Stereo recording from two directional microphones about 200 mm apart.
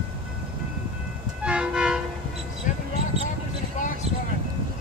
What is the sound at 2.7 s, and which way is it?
Basketball bounce, 40° left (ahead or behind).